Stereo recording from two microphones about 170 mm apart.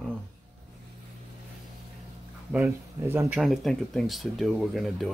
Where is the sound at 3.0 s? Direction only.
15° right (ahead or behind).